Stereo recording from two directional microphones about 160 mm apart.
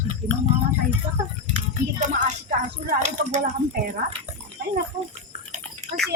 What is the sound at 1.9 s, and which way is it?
Speech, 50° right (ahead or behind).